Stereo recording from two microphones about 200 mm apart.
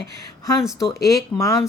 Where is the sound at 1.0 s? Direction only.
15° left (ahead or behind).